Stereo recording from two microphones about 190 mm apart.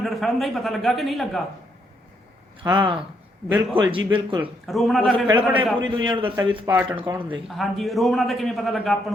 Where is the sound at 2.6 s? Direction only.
25° right (ahead or behind).